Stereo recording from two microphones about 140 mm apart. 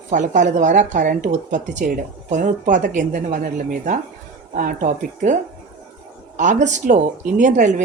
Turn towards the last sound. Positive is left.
turn(degrees=-65)  # may be behind; listen again after turning